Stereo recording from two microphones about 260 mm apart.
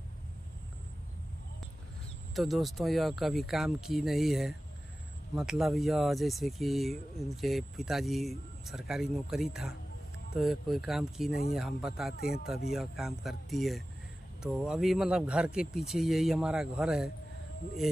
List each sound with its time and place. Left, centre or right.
2.3 s speech: centre
12.1 s speech: left
12.7 s speech: centre